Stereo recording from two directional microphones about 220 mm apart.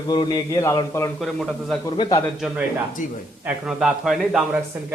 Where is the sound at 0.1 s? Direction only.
20° left (ahead or behind).